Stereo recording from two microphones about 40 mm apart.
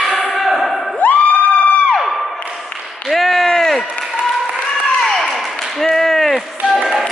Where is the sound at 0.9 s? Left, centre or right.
Left.